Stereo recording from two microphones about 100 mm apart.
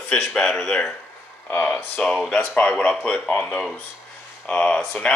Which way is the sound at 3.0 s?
10° left (ahead or behind).